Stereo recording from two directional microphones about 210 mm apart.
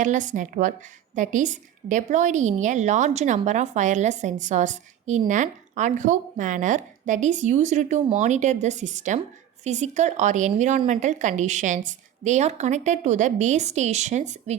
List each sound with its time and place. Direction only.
0.0 s speech: 35° right (ahead or behind)